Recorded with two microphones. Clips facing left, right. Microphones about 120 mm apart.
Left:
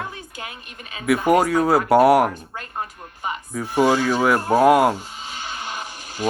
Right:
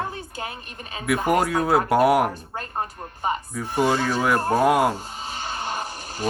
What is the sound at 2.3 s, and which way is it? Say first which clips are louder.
A woman's voice: right 1 dB; 35° right (ahead or behind).